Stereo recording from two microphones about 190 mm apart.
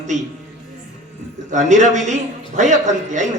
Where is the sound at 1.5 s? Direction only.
40° right (ahead or behind).